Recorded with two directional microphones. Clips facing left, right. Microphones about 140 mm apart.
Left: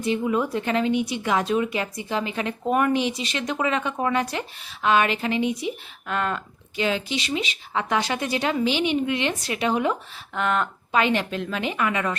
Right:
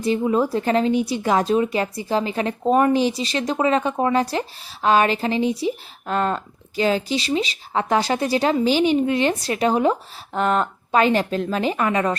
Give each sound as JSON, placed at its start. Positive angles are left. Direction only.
{"t": 0.0, "sound": "speech", "side_deg": -35}